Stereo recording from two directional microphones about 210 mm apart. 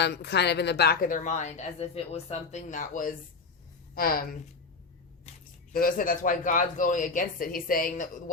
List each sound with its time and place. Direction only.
0.0 s a woman's voice: 55° left (ahead or behind)
5.7 s a woman's voice: 45° left (ahead or behind)